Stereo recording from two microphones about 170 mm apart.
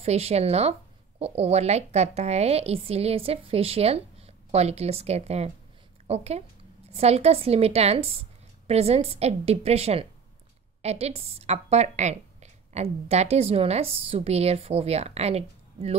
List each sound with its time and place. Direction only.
0.0 s a woman's voice: 40° right (ahead or behind)